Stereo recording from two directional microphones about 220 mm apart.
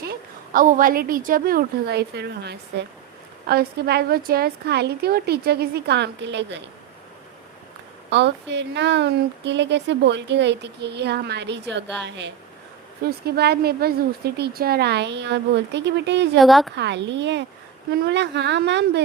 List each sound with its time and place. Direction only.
0.0 s a woman's voice: 40° right (ahead or behind)
8.1 s a woman's voice: 50° right (ahead or behind)
16.4 s a woman's voice: centre (ahead or behind)
16.7 s a woman's voice: 50° right (ahead or behind)